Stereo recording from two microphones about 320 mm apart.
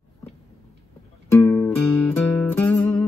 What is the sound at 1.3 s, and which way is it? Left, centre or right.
Music, centre.